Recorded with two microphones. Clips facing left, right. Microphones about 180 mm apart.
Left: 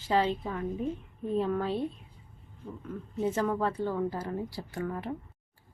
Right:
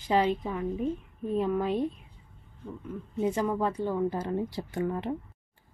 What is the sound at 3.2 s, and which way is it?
A woman's voice, 15° right (ahead or behind).